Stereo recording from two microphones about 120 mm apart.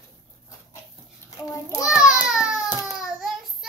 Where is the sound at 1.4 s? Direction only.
25° left (ahead or behind).